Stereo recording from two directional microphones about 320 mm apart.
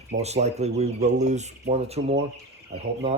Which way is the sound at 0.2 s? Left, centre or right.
Centre.